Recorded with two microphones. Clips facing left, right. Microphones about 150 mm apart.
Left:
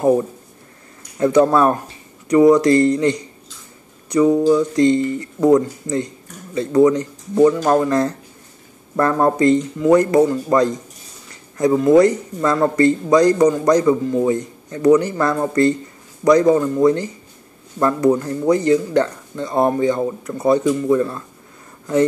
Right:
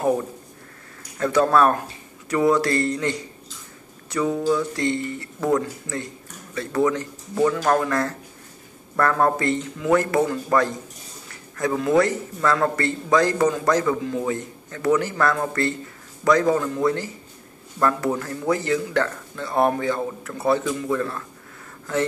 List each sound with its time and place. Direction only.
1.1 s a man's voice: 20° left (ahead or behind)